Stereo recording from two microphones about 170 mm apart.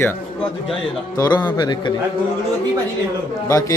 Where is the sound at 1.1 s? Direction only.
25° left (ahead or behind).